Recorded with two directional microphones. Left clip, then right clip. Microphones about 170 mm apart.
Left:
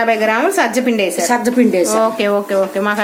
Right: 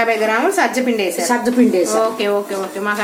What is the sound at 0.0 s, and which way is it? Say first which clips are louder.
A woman's voice: left 2 dB; 45° left (ahead or behind).